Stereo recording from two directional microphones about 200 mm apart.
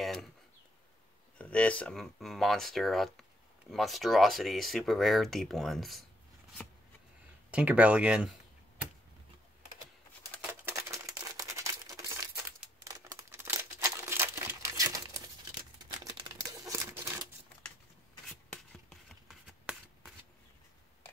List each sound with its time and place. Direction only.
0.0 s a sound: centre (ahead or behind)
1.4 s speech: 5° left (ahead or behind)
7.5 s speech: 5° right (ahead or behind)
10.4 s a sound: 10° right (ahead or behind)
12.8 s crumpling: 15° right (ahead or behind)
16.6 s typewriter: 15° right (ahead or behind)
18.5 s shuffling cards: centre (ahead or behind)